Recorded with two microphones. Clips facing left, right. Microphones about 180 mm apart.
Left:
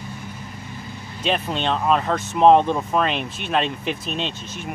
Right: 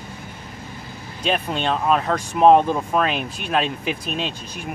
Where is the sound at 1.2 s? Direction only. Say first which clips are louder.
Even; centre (ahead or behind).